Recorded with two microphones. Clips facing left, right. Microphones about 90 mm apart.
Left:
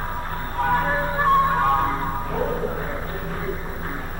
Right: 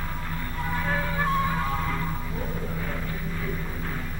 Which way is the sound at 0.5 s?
50° left (ahead or behind).